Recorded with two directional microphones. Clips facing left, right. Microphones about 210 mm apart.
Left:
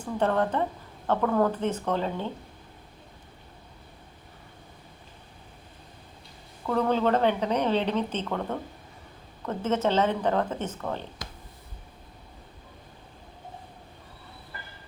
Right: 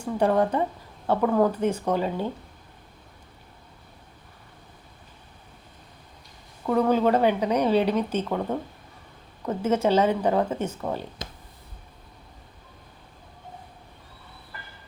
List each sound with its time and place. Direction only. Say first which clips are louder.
0.0 s a woman's voice: right 3 dB; 10° right (ahead or behind)
6.7 s a woman's voice: right 3 dB; 10° right (ahead or behind)